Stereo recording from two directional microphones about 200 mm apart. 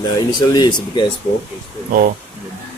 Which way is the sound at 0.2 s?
20° left (ahead or behind).